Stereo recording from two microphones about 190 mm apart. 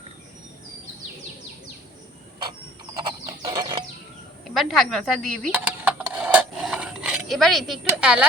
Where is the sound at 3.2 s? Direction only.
20° right (ahead or behind).